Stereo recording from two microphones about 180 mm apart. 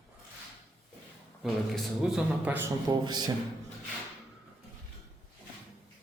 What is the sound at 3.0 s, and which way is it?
Speech, 25° right (ahead or behind).